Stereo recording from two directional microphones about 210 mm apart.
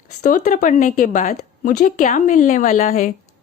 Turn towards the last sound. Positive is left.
turn(degrees=35)  # may be behind; listen again after turning